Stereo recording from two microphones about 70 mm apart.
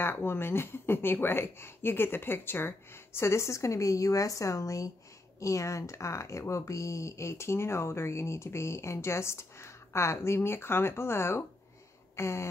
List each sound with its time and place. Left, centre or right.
0.0 s speech: left